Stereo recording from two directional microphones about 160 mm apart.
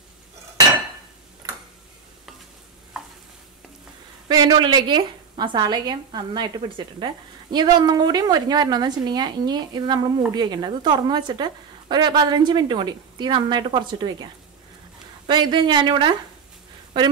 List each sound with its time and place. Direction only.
1.4 s tick-tock: 25° right (ahead or behind)
4.3 s a woman's voice: 25° right (ahead or behind)
7.5 s a woman's voice: 25° right (ahead or behind)
15.2 s a woman's voice: 30° right (ahead or behind)